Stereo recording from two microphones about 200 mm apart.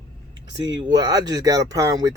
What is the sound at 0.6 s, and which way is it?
Speech, 20° right (ahead or behind).